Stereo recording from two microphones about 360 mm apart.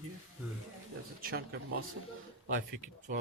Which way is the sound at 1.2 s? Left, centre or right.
Right.